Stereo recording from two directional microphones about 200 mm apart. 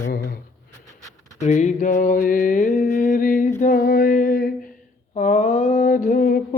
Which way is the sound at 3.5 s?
45° left (ahead or behind).